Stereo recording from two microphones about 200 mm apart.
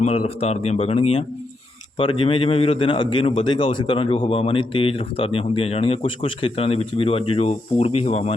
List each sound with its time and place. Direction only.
0.0 s a man's voice: 30° left (ahead or behind)